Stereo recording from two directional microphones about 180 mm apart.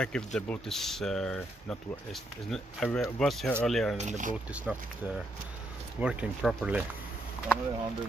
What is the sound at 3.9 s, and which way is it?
Speech, 40° right (ahead or behind).